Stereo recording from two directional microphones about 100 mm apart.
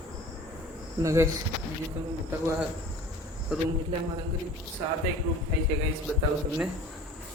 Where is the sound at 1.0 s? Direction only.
30° right (ahead or behind).